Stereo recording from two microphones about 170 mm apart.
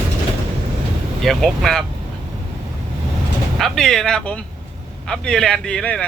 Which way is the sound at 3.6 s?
5° left (ahead or behind).